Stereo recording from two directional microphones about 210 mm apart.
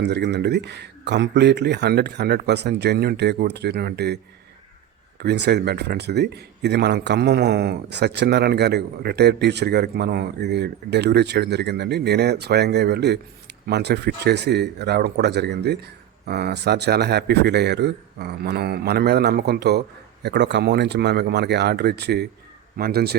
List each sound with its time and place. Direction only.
0.0 s speech: 55° right (ahead or behind)
5.2 s speech: 50° right (ahead or behind)